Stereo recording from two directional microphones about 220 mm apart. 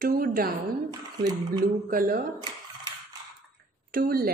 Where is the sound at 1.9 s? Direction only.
40° right (ahead or behind).